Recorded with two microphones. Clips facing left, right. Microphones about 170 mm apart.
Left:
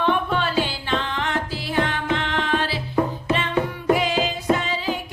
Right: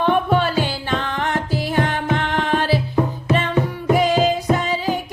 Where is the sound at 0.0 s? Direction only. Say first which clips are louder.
Right 4 dB; 45° right (ahead or behind).